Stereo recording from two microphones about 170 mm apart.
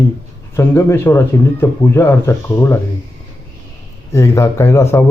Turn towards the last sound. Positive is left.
turn(degrees=15)  # may be behind; listen again after turning